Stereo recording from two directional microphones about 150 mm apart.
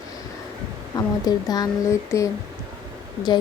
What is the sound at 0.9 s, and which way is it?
Speech, 25° left (ahead or behind).